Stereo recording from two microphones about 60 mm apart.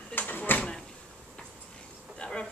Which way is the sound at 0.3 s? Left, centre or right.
Left.